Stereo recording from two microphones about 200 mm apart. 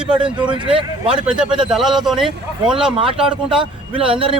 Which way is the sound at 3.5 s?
25° right (ahead or behind).